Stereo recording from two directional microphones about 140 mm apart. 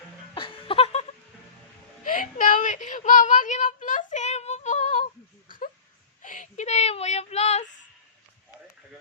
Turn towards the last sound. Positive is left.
turn(degrees=50)  # may be behind; listen again after turning